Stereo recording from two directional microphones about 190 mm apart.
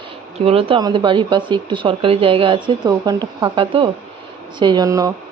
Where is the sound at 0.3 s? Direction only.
30° right (ahead or behind).